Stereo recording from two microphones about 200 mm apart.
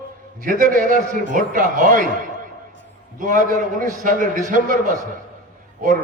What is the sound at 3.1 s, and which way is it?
A man's voice, 40° right (ahead or behind).